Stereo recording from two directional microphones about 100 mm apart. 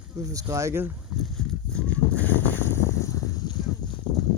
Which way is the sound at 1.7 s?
15° left (ahead or behind).